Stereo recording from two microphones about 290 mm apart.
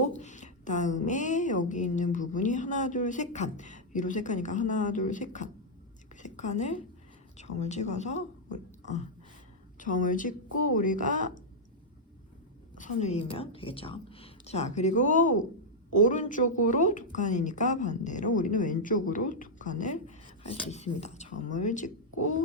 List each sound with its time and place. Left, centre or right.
0.2 s a woman's voice: left
12.7 s a woman's voice: left